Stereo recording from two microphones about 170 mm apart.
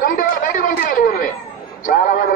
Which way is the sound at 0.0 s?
55° left (ahead or behind).